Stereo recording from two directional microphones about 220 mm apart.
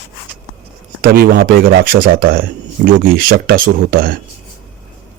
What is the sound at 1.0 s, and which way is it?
Speech, 40° right (ahead or behind).